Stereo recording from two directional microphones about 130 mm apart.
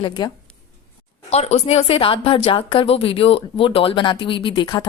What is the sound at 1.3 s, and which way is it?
A woman's voice, 55° left (ahead or behind).